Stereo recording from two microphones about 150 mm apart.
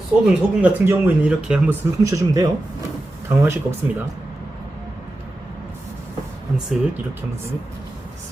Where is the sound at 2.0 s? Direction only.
25° right (ahead or behind).